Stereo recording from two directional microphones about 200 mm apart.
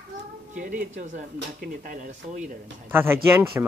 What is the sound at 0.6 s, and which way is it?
Speech, 40° right (ahead or behind).